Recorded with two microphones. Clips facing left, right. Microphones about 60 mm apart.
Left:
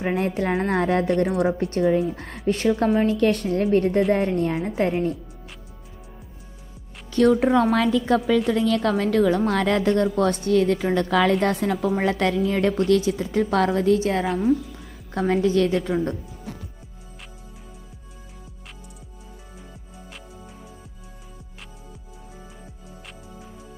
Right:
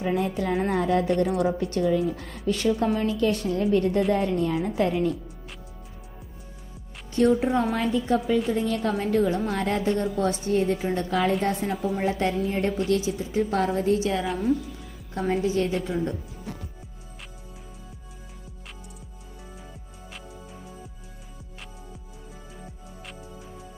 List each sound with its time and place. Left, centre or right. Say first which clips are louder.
0.0 s a woman's voice: left 2 dB; left
2.4 s a woman's voice: left 3 dB; left
3.1 s a woman's voice: left 4 dB; left
4.1 s a woman's voice: left 2 dB; left
4.6 s a woman's voice: left 1 dB; left
7.1 s a woman's voice: left 3 dB; left
8.5 s a woman's voice: left 4 dB; left
14.2 s speech: left 4 dB; centre
15.1 s a woman's voice: left 4 dB; left